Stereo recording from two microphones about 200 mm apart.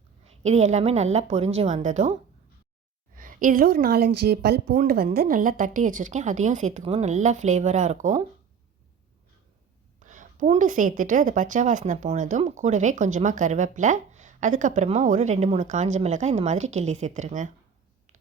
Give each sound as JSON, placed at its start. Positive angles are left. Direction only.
{"t": 0.4, "sound": "a woman's voice", "side_deg": -35}
{"t": 3.2, "sound": "a woman's voice", "side_deg": -45}
{"t": 10.0, "sound": "a woman's voice", "side_deg": -40}